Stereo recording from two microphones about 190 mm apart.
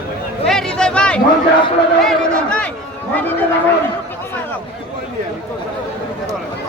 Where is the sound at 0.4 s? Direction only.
5° left (ahead or behind).